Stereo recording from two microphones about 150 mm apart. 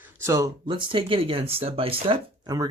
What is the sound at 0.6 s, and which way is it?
Speech, 35° right (ahead or behind).